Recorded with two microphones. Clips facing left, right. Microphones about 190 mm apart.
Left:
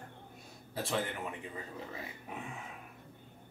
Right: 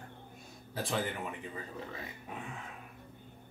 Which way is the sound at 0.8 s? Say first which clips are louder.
Even; centre (ahead or behind).